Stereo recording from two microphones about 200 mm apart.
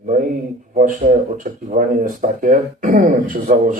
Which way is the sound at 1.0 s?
40° right (ahead or behind).